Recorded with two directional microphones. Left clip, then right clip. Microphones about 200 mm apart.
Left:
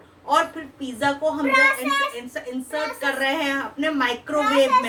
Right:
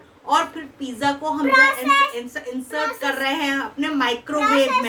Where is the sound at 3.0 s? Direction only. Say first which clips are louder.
Left 3 dB; 15° right (ahead or behind).